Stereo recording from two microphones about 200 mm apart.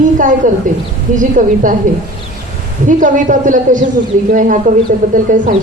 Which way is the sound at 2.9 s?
40° right (ahead or behind).